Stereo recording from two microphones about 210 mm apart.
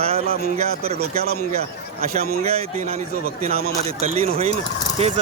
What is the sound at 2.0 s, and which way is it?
Speech, 30° right (ahead or behind).